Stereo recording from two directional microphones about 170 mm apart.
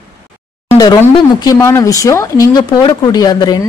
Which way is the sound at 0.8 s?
25° left (ahead or behind).